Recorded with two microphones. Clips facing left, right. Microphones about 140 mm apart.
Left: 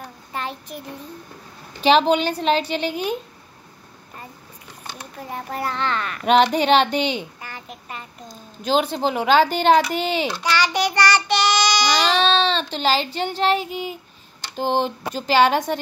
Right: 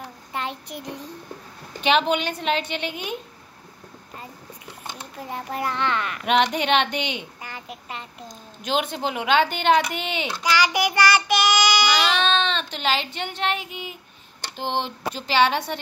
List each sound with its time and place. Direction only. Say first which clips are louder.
0.3 s a child's voice: left 1 dB; 20° right (ahead or behind)
1.8 s speech: left 5 dB; 35° left (ahead or behind)
4.8 s a sound: left 1 dB; 20° right (ahead or behind)
5.7 s a child's voice: even; 15° right (ahead or behind)
6.2 s speech: left 5 dB; 35° left (ahead or behind)
7.4 s a sound: even; 15° right (ahead or behind)
8.6 s speech: left 5 dB; 35° left (ahead or behind)
10.4 s child singing: right 2 dB; 10° right (ahead or behind)
11.9 s speech: left 3 dB; 35° left (ahead or behind)